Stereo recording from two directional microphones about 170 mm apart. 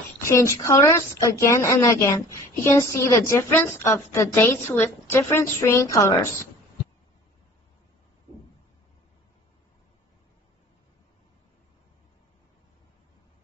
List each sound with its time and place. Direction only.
0.2 s a woman's voice: 15° left (ahead or behind)